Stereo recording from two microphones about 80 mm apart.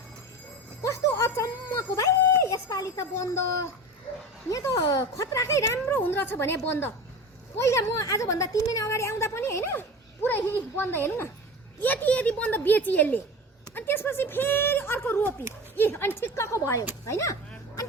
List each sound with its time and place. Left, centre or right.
0.8 s a sound: left
4.4 s speech: left
4.7 s speech: left
5.1 s a woman's voice: left
6.0 s a woman's voice: left